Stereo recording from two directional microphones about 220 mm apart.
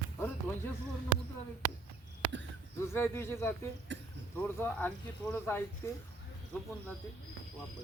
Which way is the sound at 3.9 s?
55° right (ahead or behind).